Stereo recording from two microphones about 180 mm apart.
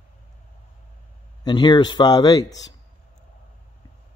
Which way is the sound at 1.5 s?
25° left (ahead or behind).